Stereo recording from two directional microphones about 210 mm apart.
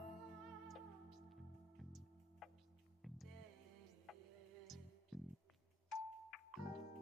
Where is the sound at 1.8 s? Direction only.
Centre (ahead or behind).